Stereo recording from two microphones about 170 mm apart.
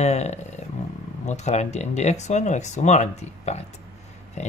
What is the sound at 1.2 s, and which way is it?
Speech, 40° left (ahead or behind).